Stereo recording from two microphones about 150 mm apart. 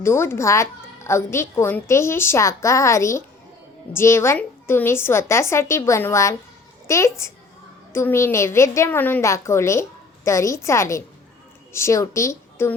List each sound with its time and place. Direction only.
0.0 s a woman's voice: 15° left (ahead or behind)